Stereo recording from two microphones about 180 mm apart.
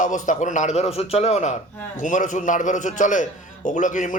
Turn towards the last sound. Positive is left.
turn(degrees=45)  # may be behind; listen again after turning